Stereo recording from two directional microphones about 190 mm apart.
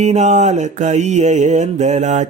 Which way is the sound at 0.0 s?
35° right (ahead or behind).